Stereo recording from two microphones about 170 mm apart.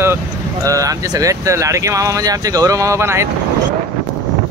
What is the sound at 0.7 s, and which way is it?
Speech, 20° right (ahead or behind).